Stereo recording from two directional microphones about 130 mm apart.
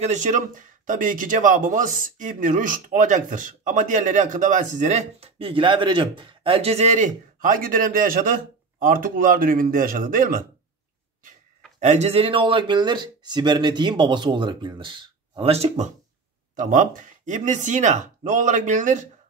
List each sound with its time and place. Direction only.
0.0 s speech: 70° right (ahead or behind); by 10.4 s 90° right
11.8 s speech: 55° right (ahead or behind)
16.5 s speech: 80° right